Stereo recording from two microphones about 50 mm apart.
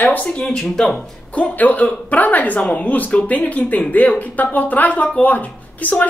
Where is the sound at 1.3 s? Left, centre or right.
Left.